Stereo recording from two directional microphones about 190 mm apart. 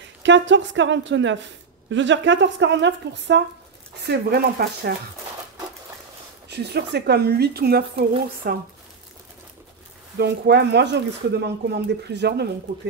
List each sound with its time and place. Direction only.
0.2 s speech: 70° right (ahead or behind)
4.0 s speech: 55° right (ahead or behind)
6.5 s speech: 60° right (ahead or behind)
10.1 s speech: 60° right (ahead or behind)